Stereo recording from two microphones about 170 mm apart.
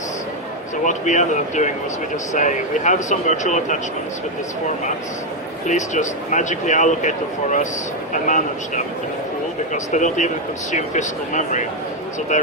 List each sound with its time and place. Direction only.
0.9 s speech: 45° left (ahead or behind)
5.6 s speech: 45° left (ahead or behind)
8.1 s speech: 45° left (ahead or behind)